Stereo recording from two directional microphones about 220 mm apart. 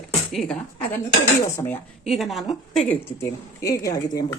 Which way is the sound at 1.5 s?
10° left (ahead or behind).